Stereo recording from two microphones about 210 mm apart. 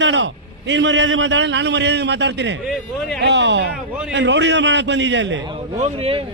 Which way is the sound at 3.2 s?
55° right (ahead or behind).